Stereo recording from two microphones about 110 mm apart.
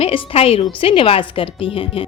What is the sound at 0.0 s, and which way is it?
A woman's voice, 60° left (ahead or behind).